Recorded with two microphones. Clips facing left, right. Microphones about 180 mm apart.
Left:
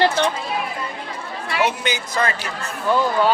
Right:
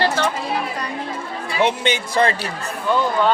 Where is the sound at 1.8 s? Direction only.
25° right (ahead or behind).